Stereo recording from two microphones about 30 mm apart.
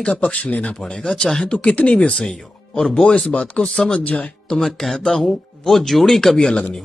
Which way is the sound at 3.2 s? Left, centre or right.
Left.